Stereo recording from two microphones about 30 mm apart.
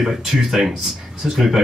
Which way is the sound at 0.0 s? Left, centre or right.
Centre.